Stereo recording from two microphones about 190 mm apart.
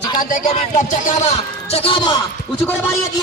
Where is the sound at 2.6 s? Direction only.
10° left (ahead or behind).